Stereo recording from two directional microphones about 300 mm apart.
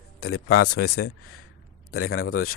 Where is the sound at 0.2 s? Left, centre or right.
Left.